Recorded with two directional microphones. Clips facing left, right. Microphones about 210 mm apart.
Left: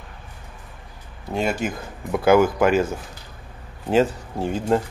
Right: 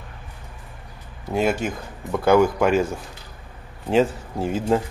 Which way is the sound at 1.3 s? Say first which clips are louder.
Right 2 dB; centre (ahead or behind).